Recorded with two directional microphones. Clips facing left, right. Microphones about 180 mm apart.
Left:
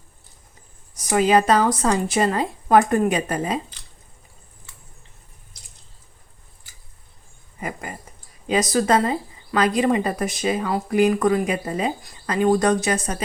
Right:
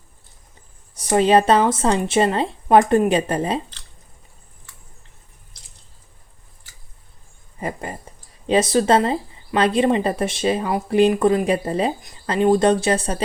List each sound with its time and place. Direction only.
1.1 s speech: 30° right (ahead or behind)
7.6 s a sound: 30° right (ahead or behind)
8.4 s speech: 30° right (ahead or behind)